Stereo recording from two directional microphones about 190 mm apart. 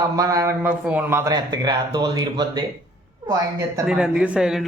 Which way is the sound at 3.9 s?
5° right (ahead or behind).